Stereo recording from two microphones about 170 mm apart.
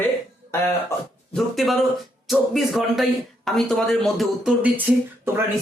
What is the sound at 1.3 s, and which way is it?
Speech, centre (ahead or behind).